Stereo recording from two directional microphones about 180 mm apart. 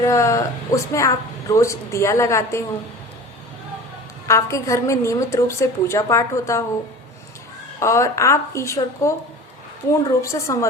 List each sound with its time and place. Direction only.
0.0 s a woman's voice: 15° left (ahead or behind)
4.3 s a woman's voice: 15° left (ahead or behind)
7.8 s a woman's voice: 15° left (ahead or behind)